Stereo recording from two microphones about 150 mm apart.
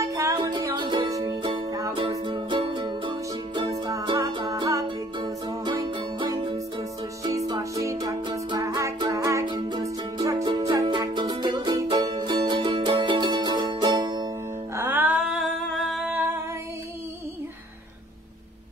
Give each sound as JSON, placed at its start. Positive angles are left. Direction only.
{"t": 0.0, "sound": "music", "side_deg": -20}
{"t": 2.0, "sound": "music", "side_deg": -35}
{"t": 9.5, "sound": "music", "side_deg": -30}
{"t": 14.8, "sound": "a sound", "side_deg": -10}